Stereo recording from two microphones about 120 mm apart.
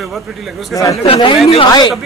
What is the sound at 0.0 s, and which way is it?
Speech, centre (ahead or behind).